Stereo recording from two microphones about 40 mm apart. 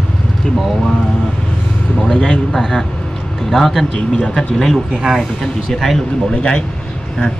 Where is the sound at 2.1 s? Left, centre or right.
Left.